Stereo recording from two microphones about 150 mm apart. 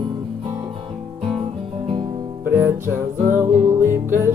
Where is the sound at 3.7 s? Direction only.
15° right (ahead or behind).